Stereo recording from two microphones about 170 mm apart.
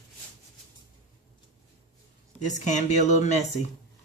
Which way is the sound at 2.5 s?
45° left (ahead or behind).